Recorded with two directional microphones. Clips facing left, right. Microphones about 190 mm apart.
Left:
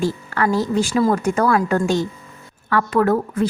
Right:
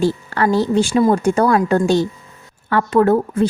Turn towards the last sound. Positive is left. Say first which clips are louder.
# right 4 dB
turn(degrees=-25)  # may be behind; listen again after turning